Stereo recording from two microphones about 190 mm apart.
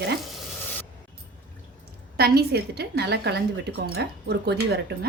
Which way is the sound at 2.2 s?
55° right (ahead or behind).